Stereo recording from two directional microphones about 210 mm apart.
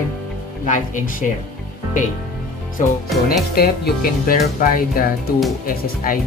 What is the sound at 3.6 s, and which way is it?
Speech, 45° left (ahead or behind).